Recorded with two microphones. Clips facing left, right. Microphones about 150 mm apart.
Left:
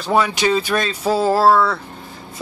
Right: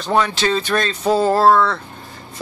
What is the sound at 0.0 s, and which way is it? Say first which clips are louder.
Speech: left 1 dB; 5° left (ahead or behind).